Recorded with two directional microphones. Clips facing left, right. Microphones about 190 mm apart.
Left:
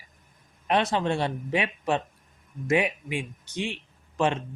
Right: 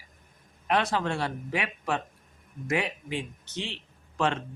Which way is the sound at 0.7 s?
20° left (ahead or behind).